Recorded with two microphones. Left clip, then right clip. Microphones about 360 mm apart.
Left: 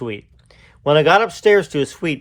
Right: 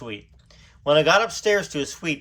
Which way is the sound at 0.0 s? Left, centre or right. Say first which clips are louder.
Left 7 dB; centre.